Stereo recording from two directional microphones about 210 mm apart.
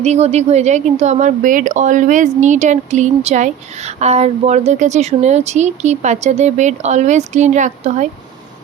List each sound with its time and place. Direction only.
0.0 s a woman's voice: 30° right (ahead or behind)